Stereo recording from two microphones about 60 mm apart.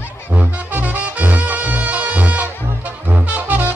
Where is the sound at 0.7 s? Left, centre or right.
Right.